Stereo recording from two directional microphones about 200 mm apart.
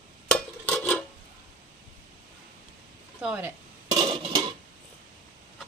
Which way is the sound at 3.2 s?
5° right (ahead or behind).